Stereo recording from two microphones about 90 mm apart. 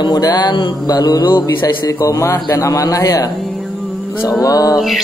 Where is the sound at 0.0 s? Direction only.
50° left (ahead or behind).